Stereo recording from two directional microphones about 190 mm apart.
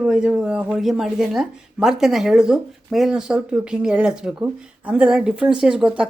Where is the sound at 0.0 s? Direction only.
5° right (ahead or behind).